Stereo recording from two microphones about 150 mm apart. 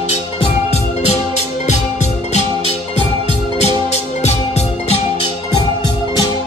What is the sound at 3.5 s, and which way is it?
Music, 45° left (ahead or behind).